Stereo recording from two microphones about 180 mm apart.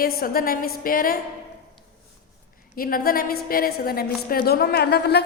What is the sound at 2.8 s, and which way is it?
A woman's voice, 55° left (ahead or behind).